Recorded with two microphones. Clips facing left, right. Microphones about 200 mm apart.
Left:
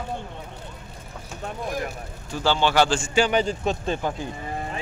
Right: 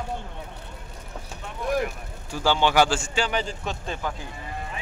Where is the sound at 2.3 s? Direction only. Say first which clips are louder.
Even; 15° right (ahead or behind).